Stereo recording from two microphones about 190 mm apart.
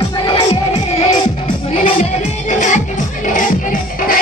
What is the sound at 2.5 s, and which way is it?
Music, 40° left (ahead or behind).